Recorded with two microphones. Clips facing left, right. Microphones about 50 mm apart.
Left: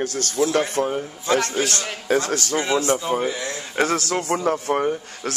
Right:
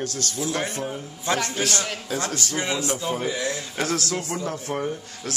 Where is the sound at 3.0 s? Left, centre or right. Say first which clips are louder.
Left 3 dB; centre.